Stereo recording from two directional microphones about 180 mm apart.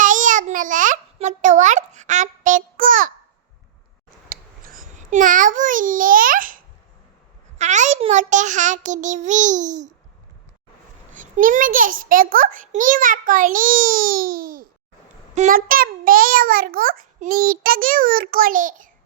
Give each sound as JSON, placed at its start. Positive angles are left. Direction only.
{"t": 0.0, "sound": "babbling", "side_deg": -45}
{"t": 4.3, "sound": "babbling", "side_deg": -50}
{"t": 7.6, "sound": "a child's voice", "side_deg": -40}
{"t": 11.1, "sound": "a child's voice", "side_deg": -45}